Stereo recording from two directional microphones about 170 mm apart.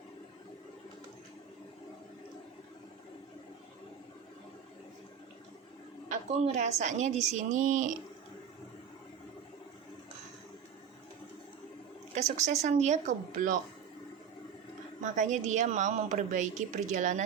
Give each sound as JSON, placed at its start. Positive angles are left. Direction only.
{"t": 6.1, "sound": "speech", "side_deg": -40}
{"t": 12.1, "sound": "speech", "side_deg": -45}
{"t": 15.0, "sound": "speech", "side_deg": -45}